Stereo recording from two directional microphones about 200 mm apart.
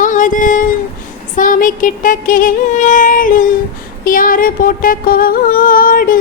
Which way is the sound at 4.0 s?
45° left (ahead or behind).